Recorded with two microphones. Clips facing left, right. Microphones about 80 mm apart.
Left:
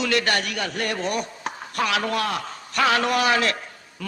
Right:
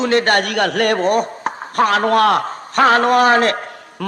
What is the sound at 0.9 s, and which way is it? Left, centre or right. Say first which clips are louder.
Speech: right 10 dB; right.